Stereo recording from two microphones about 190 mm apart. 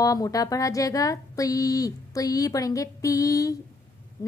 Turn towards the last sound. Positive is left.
turn(degrees=20)  # may be behind; listen again after turning